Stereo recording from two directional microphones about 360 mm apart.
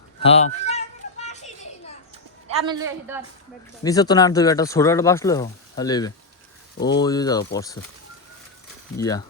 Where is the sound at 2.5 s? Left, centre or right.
Centre.